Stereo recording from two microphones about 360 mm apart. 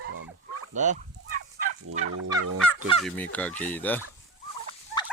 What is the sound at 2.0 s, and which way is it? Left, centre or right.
Fowl, right.